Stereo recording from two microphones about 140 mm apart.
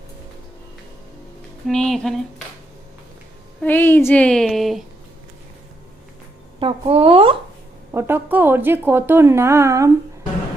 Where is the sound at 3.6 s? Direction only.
15° left (ahead or behind).